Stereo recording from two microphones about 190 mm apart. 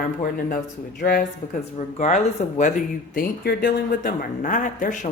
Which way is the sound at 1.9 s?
40° left (ahead or behind).